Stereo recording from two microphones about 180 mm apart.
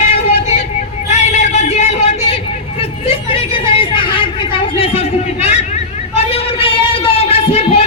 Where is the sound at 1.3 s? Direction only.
40° left (ahead or behind).